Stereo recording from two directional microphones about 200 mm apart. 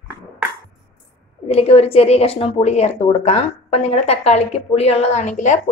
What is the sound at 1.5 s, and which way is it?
A woman's voice, 30° left (ahead or behind).